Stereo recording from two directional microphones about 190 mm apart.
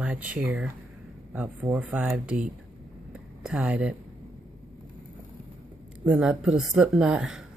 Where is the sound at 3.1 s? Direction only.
5° right (ahead or behind).